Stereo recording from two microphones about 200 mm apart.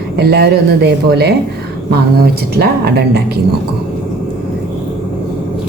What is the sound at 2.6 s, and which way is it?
Speech, 55° right (ahead or behind).